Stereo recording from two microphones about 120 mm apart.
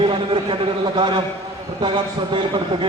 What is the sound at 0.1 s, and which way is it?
A man's voice, 40° right (ahead or behind).